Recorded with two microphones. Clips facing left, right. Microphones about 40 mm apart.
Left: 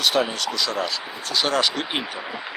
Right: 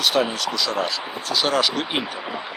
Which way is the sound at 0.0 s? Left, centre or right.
Centre.